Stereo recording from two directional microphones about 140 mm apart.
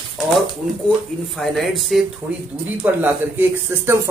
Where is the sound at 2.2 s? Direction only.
15° right (ahead or behind).